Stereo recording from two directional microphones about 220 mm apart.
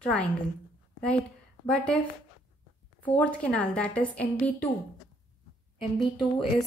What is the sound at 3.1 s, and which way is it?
A woman's voice, 5° left (ahead or behind).